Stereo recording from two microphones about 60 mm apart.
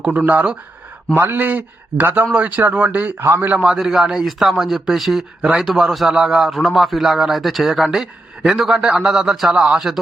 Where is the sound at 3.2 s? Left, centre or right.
Right.